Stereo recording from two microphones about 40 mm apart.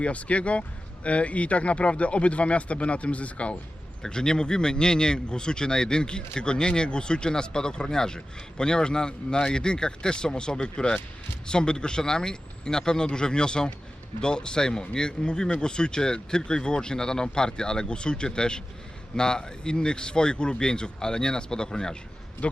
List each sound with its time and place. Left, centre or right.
0.0 s speech: left
4.0 s speech: centre